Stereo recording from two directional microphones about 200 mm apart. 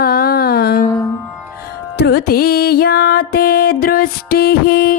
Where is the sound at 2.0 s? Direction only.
55° left (ahead or behind).